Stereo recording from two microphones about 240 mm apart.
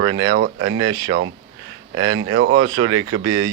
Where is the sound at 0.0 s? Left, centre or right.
Right.